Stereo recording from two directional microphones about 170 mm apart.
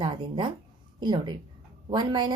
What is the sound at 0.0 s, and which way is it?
A woman's voice, 30° right (ahead or behind).